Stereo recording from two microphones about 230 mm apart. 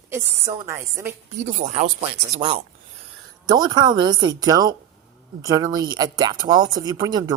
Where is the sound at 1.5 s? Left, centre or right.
Right.